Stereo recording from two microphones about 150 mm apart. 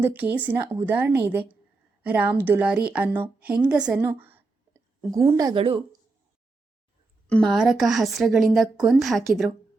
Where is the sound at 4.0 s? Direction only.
15° right (ahead or behind).